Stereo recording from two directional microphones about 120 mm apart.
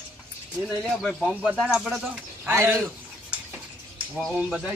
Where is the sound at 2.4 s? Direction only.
20° right (ahead or behind).